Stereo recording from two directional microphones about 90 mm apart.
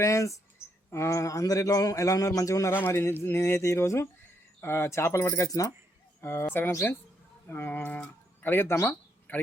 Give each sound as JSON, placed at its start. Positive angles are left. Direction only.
{"t": 0.0, "sound": "speech", "side_deg": 35}
{"t": 2.7, "sound": "speech", "side_deg": 25}
{"t": 6.5, "sound": "a man's voice", "side_deg": 25}